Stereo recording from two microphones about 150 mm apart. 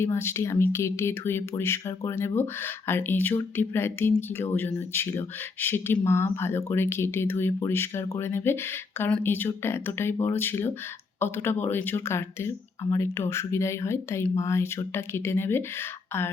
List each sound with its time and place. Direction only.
0.0 s speech: 15° left (ahead or behind)